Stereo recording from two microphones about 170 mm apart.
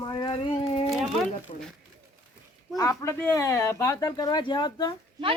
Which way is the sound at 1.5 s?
40° left (ahead or behind).